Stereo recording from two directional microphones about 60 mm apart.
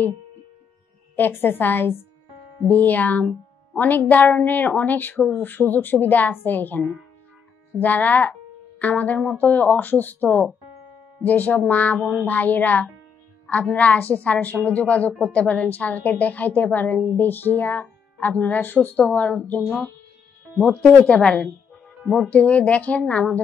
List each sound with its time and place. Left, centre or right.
1.1 s a woman's voice: left
7.8 s a woman's voice: left
12.0 s speech: centre
12.3 s a woman's voice: left
19.6 s speech: centre
20.8 s a woman's voice: centre